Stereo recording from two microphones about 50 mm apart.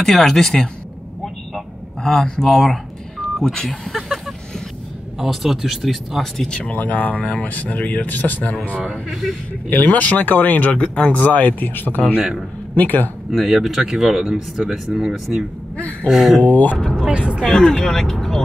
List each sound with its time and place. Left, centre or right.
0.0 s speech: centre
2.2 s speech: centre
5.2 s speech: centre
6.3 s speech: centre
6.7 s speech: left
8.8 s speech: centre
9.7 s speech: left
10.7 s speech: left
13.3 s speech: centre
16.3 s speech: left
16.7 s speech: centre
17.0 s vehicle: centre
17.4 s speech: centre